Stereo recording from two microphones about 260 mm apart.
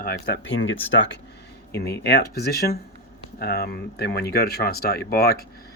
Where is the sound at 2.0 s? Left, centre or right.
Left.